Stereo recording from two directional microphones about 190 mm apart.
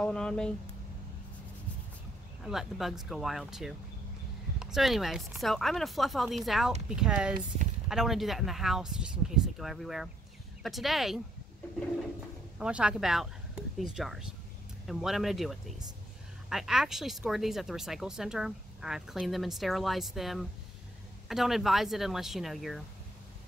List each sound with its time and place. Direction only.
0.0 s speech: 5° left (ahead or behind)
2.4 s speech: centre (ahead or behind)
12.5 s speech: 5° right (ahead or behind)